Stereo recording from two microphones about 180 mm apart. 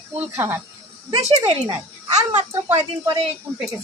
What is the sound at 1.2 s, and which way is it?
Speech, 35° right (ahead or behind).